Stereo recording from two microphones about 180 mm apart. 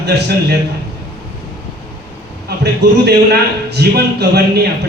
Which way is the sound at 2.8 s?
65° right (ahead or behind).